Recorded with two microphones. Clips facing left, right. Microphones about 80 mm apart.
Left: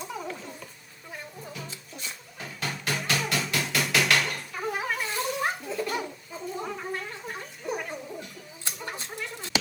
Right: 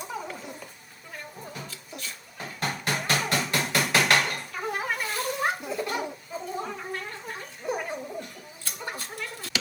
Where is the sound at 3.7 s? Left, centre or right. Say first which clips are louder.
Right 2 dB; right.